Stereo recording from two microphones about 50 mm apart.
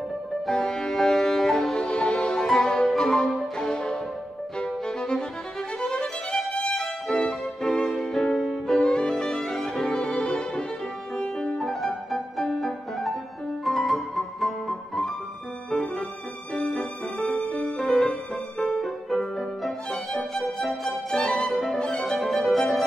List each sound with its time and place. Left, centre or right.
0.5 s music: centre
5.8 s violin: centre
6.7 s music: centre
9.8 s music: centre
11.5 s music: centre
20.8 s music: centre
21.5 s violin: centre
21.7 s music: centre